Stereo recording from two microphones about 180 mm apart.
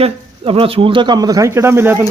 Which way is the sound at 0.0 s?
30° right (ahead or behind).